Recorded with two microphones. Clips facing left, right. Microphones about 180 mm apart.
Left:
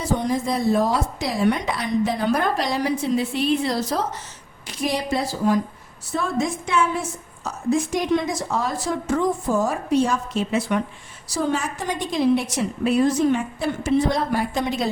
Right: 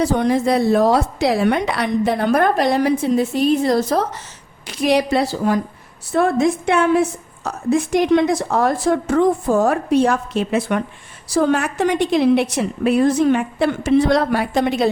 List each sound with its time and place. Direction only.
0.0 s a woman's voice: 70° right (ahead or behind); by 4.0 s 50° right (ahead or behind)
4.6 s a woman's voice: 75° right (ahead or behind)